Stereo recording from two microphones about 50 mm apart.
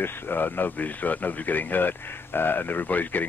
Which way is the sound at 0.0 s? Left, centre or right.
Left.